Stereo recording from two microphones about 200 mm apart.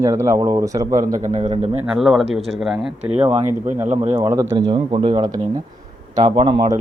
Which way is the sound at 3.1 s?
30° right (ahead or behind).